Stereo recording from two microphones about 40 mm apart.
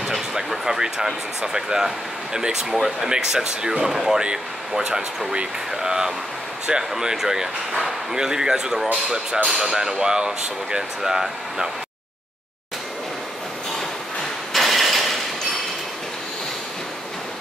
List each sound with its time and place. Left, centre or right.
0.0 s a sound: centre
2.3 s speech: centre
14.5 s mechanisms: centre